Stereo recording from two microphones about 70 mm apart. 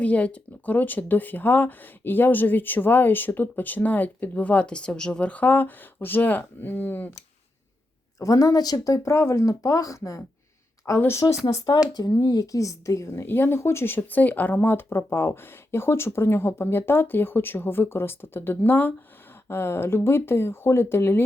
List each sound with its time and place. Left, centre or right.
0.0 s speech: centre
8.2 s speech: left
12.2 s speech: left
12.5 s speech: left